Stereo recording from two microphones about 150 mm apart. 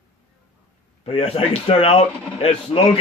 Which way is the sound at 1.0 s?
40° left (ahead or behind).